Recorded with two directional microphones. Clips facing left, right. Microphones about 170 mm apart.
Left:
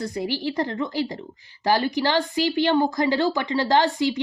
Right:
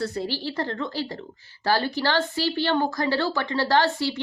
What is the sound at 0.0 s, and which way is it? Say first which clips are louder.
Speech: left 2 dB; 15° left (ahead or behind).